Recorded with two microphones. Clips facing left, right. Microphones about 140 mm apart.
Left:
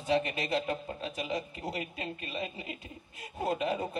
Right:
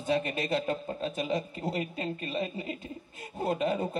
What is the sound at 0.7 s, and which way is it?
A man's voice, 30° right (ahead or behind).